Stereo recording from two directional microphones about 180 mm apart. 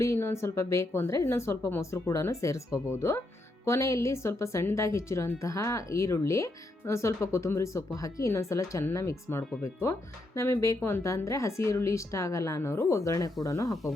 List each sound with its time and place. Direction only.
0.0 s a woman's voice: 15° left (ahead or behind)